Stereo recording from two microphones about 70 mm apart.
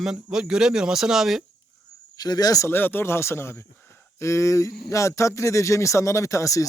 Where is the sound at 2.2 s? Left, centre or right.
Left.